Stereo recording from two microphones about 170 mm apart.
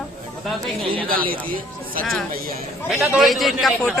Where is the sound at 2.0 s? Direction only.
5° left (ahead or behind).